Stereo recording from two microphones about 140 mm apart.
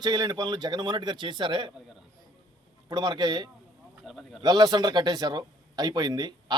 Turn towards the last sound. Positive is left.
turn(degrees=-30)  # may be behind; listen again after turning